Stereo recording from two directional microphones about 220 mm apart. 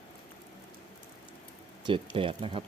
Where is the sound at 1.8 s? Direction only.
25° right (ahead or behind).